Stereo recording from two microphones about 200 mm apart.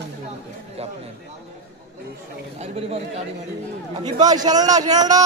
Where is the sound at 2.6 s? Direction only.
30° right (ahead or behind).